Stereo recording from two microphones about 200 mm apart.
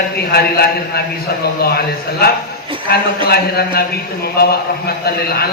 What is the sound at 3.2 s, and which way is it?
A man's voice, 50° left (ahead or behind).